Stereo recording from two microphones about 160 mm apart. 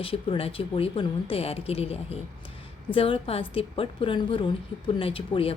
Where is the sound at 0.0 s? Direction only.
35° left (ahead or behind).